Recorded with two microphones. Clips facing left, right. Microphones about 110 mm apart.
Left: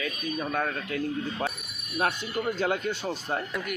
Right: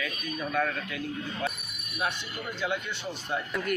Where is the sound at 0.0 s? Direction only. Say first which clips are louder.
Left 3 dB; 35° left (ahead or behind).